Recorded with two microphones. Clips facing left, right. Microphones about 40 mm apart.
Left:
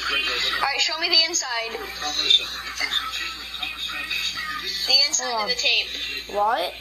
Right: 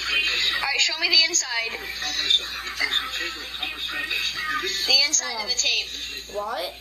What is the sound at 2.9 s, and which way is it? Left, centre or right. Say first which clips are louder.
Speech: even; centre.